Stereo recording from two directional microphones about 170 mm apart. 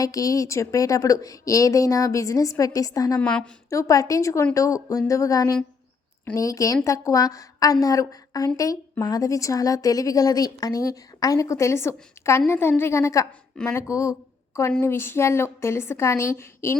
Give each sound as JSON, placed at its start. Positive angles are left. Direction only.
{"t": 0.0, "sound": "a woman's voice", "side_deg": 20}
{"t": 3.2, "sound": "a woman's voice", "side_deg": 5}
{"t": 3.7, "sound": "a woman's voice", "side_deg": 20}